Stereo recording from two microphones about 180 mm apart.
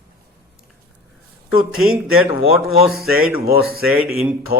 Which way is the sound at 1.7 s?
5° right (ahead or behind).